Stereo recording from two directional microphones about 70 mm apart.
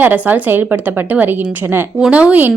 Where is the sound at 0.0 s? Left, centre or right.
Right.